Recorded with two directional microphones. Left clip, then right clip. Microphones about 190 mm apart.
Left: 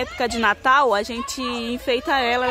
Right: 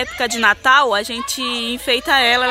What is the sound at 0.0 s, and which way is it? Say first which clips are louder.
Speech: right 4 dB; 5° left (ahead or behind).